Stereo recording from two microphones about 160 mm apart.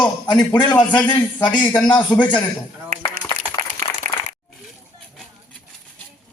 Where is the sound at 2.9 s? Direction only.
60° right (ahead or behind).